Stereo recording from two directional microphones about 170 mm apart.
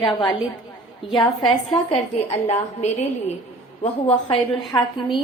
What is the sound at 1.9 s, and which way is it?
A woman's voice, 35° left (ahead or behind).